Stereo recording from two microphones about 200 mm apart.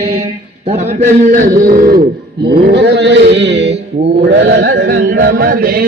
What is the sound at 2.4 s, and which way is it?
Chant, 55° right (ahead or behind).